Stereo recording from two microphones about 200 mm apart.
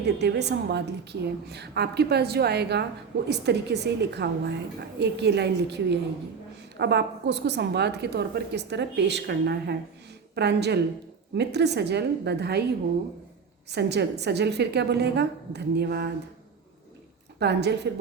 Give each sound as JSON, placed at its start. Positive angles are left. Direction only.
{"t": 0.0, "sound": "a woman's voice", "side_deg": -60}
{"t": 13.7, "sound": "a woman's voice", "side_deg": -55}
{"t": 17.4, "sound": "a woman's voice", "side_deg": -55}